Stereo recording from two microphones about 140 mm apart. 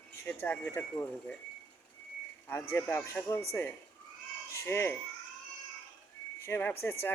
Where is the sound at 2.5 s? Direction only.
15° left (ahead or behind).